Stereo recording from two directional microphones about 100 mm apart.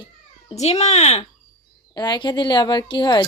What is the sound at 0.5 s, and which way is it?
Speech, 90° left.